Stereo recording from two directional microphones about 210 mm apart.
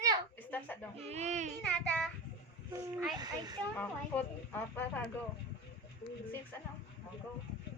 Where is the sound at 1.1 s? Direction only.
35° right (ahead or behind).